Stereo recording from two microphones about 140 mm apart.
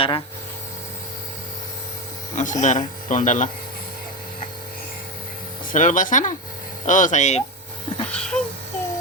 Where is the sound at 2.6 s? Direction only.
60° left (ahead or behind).